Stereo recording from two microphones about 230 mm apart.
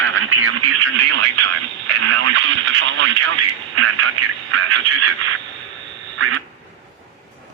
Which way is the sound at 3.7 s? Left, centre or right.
Right.